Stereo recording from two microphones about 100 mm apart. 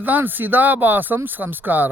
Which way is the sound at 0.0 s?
20° right (ahead or behind).